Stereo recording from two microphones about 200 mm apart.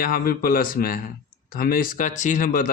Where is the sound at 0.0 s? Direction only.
45° left (ahead or behind).